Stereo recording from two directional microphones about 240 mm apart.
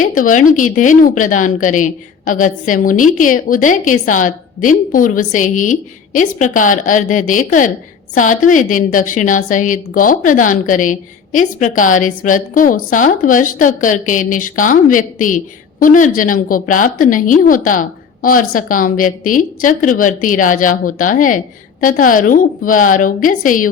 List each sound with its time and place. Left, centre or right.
0.0 s a woman's voice: left